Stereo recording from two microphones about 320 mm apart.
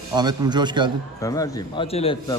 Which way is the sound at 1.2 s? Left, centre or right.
Centre.